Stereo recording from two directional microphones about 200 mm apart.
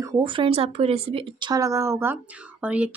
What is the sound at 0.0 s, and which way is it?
Speech, 20° right (ahead or behind).